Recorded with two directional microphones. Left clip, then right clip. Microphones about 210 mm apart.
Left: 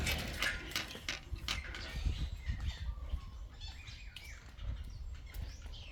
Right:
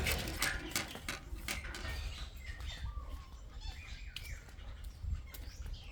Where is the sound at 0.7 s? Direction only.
45° right (ahead or behind).